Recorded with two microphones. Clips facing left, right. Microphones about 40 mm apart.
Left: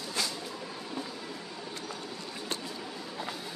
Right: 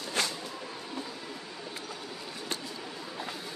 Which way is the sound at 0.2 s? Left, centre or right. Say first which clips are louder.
Right 3 dB; right.